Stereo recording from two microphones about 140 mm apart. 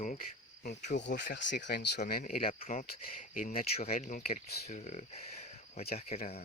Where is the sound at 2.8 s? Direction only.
80° left.